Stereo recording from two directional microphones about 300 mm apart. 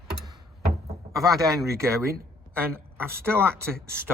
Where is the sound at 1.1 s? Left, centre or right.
Centre.